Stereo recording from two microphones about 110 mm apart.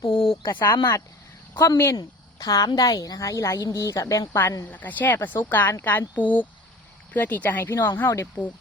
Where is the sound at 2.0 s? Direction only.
35° left (ahead or behind).